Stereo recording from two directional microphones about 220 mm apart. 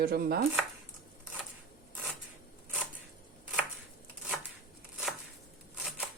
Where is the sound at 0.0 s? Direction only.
45° right (ahead or behind).